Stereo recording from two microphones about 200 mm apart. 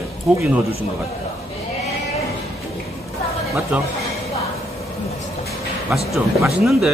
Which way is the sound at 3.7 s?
5° right (ahead or behind).